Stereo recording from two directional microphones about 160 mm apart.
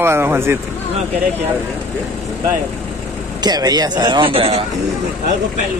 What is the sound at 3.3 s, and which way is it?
A man's voice, 25° right (ahead or behind).